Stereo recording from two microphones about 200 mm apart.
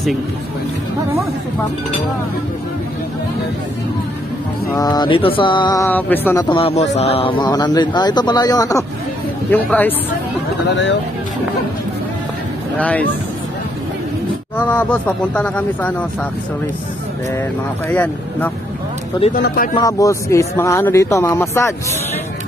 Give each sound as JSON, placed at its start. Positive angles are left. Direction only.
{"t": 4.7, "sound": "speech", "side_deg": 20}
{"t": 5.9, "sound": "speech", "side_deg": 10}
{"t": 6.6, "sound": "speech", "side_deg": 30}
{"t": 10.7, "sound": "speech", "side_deg": 65}
{"t": 12.7, "sound": "speech", "side_deg": 5}
{"t": 14.6, "sound": "speech", "side_deg": 10}
{"t": 17.8, "sound": "speech", "side_deg": 10}
{"t": 19.3, "sound": "speech", "side_deg": 45}
{"t": 19.7, "sound": "speech", "side_deg": 15}